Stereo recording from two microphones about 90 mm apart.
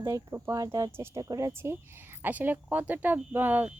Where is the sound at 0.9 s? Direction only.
30° right (ahead or behind).